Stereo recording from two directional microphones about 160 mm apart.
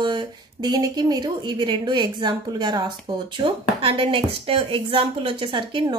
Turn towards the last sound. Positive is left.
turn(degrees=-30)  # may be behind; listen again after turning